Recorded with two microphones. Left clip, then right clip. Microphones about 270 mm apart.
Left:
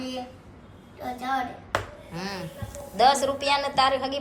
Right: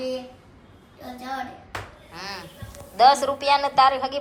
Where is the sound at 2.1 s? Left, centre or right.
Centre.